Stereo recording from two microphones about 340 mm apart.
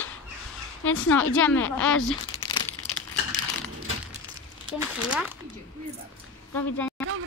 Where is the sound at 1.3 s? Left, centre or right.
Centre.